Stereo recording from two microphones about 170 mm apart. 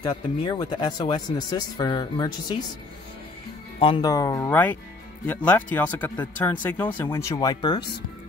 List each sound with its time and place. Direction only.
0.0 s speech: 25° left (ahead or behind)
3.8 s speech: 30° left (ahead or behind)
4.5 s speech: 10° left (ahead or behind); by 7.9 s 25° left (ahead or behind)